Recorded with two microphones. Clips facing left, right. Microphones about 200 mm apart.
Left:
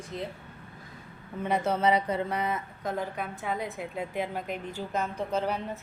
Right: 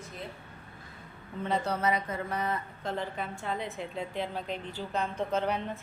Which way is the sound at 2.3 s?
10° left (ahead or behind).